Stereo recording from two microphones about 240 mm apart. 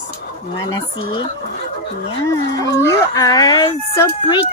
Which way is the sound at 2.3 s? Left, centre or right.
Centre.